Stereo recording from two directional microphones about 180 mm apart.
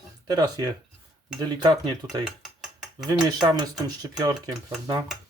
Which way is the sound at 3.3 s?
25° right (ahead or behind).